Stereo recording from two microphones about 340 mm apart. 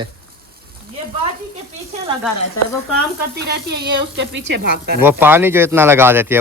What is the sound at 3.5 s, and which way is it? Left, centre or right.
Speech, right.